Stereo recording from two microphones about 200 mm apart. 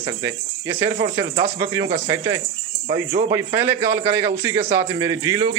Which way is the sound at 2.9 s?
50° right (ahead or behind).